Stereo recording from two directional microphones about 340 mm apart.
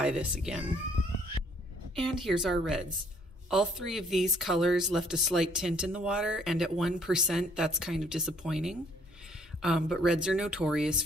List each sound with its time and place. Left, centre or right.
0.0 s speech: centre
2.0 s speech: centre